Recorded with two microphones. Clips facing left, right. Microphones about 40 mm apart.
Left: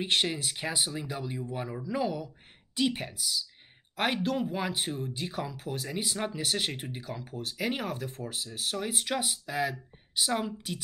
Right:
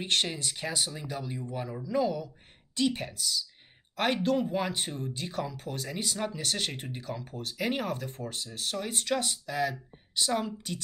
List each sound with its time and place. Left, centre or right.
0.0 s speech: centre